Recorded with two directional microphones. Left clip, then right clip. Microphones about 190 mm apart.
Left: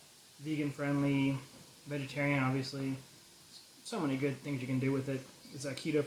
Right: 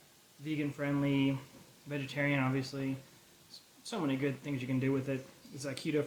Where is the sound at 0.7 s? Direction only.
20° right (ahead or behind).